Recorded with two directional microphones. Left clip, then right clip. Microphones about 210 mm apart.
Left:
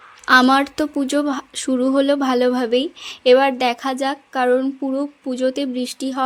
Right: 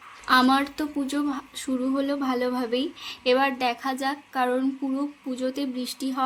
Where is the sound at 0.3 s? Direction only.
35° left (ahead or behind).